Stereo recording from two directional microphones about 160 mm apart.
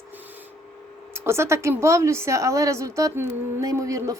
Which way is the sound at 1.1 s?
15° right (ahead or behind).